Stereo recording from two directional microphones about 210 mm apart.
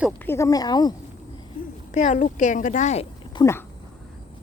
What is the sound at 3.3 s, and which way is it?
Speech, 15° left (ahead or behind).